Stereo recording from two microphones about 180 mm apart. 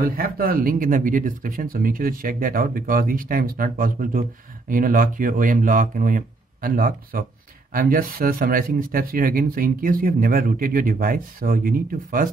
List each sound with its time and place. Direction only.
0.0 s speech: 55° right (ahead or behind)